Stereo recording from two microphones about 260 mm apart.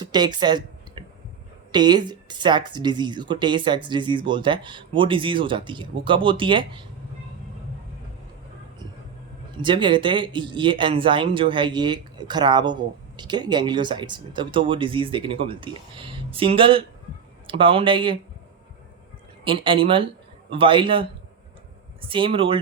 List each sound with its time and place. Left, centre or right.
0.0 s a sound: centre
1.7 s speech: centre
9.6 s speech: centre
19.5 s speech: centre